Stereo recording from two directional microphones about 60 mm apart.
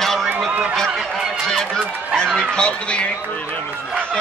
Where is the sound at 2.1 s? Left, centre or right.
Centre.